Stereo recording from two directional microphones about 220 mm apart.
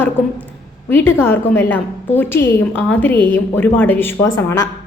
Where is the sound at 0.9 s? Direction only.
10° left (ahead or behind).